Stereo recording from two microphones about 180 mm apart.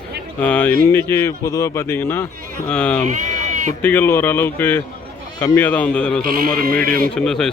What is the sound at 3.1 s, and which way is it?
Bleat, 40° right (ahead or behind).